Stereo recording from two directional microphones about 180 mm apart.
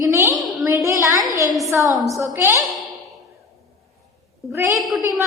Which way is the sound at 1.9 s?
Centre (ahead or behind).